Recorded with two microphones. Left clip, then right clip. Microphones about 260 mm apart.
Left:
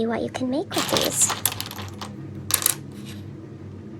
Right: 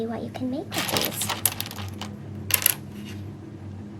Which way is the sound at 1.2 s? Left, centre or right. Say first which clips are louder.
Left 4 dB; centre.